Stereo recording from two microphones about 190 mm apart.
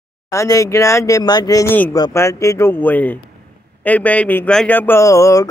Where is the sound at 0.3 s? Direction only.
15° left (ahead or behind).